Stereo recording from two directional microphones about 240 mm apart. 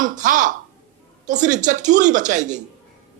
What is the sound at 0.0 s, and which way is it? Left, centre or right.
Speech, right.